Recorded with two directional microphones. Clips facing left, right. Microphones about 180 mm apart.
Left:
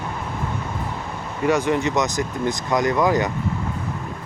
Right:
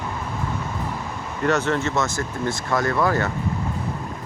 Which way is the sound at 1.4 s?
10° left (ahead or behind).